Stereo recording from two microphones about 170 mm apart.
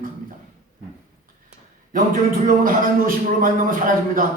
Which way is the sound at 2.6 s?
55° right (ahead or behind).